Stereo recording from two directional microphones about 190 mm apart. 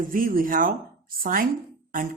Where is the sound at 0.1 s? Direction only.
50° right (ahead or behind).